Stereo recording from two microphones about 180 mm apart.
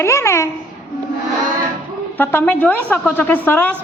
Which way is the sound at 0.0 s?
15° left (ahead or behind).